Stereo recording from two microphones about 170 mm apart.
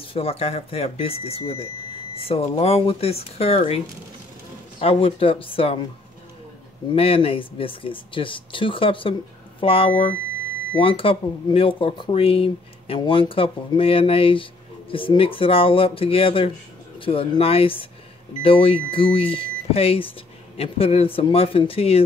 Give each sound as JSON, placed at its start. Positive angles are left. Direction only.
{"t": 0.0, "sound": "speech", "side_deg": 35}
{"t": 7.0, "sound": "speech", "side_deg": 35}